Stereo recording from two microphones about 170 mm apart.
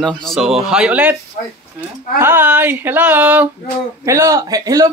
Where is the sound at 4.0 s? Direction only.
20° right (ahead or behind).